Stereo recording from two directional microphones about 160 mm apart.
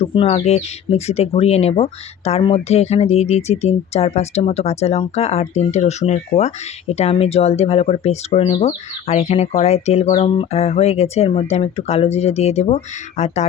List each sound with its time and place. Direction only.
0.0 s speech: 35° left (ahead or behind)